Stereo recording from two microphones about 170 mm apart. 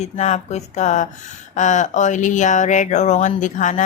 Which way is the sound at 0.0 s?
40° left (ahead or behind).